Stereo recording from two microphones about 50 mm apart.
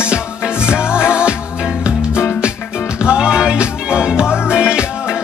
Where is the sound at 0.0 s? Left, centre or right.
Centre.